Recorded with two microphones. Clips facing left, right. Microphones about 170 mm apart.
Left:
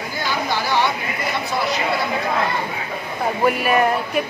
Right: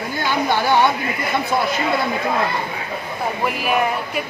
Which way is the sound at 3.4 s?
Centre (ahead or behind).